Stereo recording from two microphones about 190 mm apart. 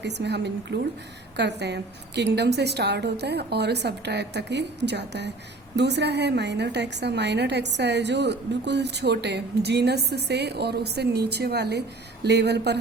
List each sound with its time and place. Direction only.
0.0 s a woman's voice: 65° right (ahead or behind)